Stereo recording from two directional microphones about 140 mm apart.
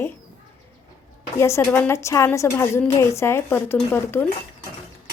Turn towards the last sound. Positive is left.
turn(degrees=15)  # may be behind; listen again after turning